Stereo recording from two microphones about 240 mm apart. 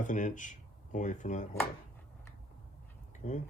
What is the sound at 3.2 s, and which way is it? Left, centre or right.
Speech, left.